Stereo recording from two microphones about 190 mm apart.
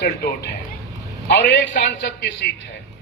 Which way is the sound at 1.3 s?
65° left (ahead or behind).